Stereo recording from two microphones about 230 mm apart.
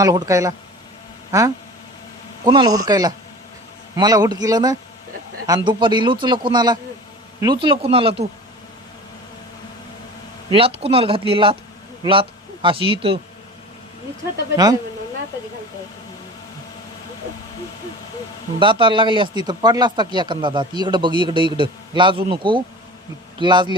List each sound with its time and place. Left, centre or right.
0.0 s a man's voice: centre
10.5 s speech: right
12.6 s speech: right
14.5 s a man's voice: centre
18.6 s speech: right